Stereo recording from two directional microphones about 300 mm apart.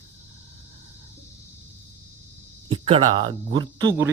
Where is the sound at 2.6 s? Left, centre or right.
Centre.